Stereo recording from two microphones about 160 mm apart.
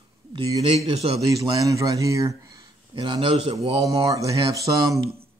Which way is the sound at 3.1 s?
35° right (ahead or behind).